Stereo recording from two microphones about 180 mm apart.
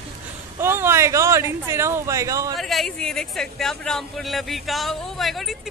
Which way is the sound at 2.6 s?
Centre (ahead or behind).